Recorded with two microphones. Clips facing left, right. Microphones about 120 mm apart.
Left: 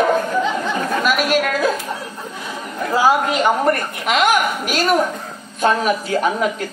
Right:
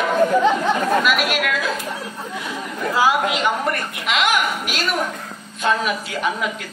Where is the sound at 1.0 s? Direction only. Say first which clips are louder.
Left 3 dB; 40° left (ahead or behind).